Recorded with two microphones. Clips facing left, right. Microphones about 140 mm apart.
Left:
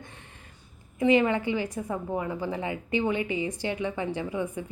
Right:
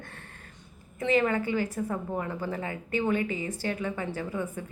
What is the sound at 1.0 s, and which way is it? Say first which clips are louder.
A woman's voice: left 3 dB; 15° left (ahead or behind).